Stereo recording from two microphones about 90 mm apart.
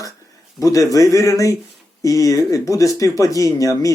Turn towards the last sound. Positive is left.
turn(degrees=40)  # may be behind; listen again after turning